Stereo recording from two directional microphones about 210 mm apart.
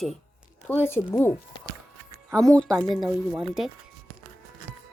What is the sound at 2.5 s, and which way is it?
A woman's voice, 5° left (ahead or behind).